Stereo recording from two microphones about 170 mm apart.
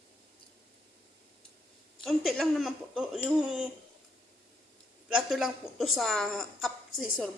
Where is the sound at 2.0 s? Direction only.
Centre (ahead or behind).